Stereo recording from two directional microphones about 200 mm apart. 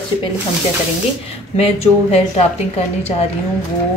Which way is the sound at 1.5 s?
30° left (ahead or behind).